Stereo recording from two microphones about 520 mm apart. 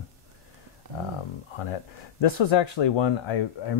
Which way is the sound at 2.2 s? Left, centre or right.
Left.